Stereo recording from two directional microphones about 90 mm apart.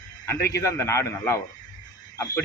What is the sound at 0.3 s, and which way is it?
A man's voice, 35° left (ahead or behind).